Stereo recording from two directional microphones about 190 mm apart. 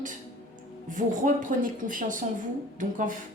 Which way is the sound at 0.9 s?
45° right (ahead or behind).